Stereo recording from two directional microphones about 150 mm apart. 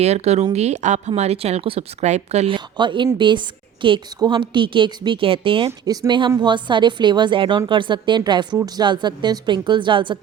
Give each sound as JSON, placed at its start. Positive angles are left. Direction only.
{"t": 0.0, "sound": "speech", "side_deg": -45}
{"t": 2.7, "sound": "a woman's voice", "side_deg": -30}
{"t": 5.8, "sound": "a woman's voice", "side_deg": -25}